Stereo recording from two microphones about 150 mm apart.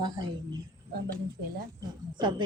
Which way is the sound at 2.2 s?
30° right (ahead or behind).